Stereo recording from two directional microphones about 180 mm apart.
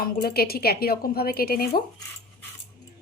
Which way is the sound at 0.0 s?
55° left (ahead or behind).